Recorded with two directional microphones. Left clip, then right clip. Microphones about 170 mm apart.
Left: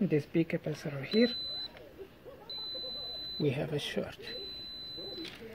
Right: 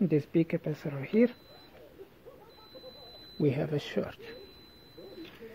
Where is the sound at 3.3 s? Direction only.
40° right (ahead or behind).